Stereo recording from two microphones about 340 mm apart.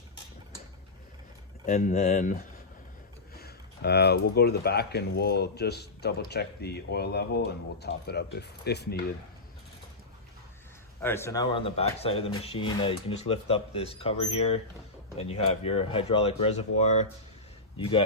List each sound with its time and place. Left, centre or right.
1.6 s speech: left
11.0 s speech: centre